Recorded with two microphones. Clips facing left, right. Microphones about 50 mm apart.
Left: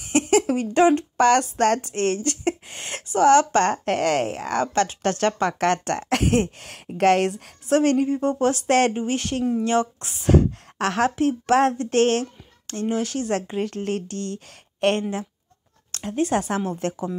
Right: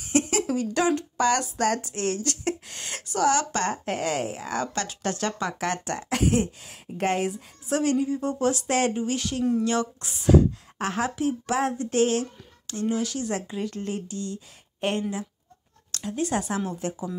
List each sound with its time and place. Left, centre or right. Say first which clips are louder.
0.3 s a sound: left 6 dB; left
1.1 s speech: left 6 dB; left
8.9 s speech: left 3 dB; left
9.4 s speech: right 1 dB; centre
9.7 s speech: left 4 dB; left
10.8 s speech: left 5 dB; left
15.9 s speech: left 4 dB; left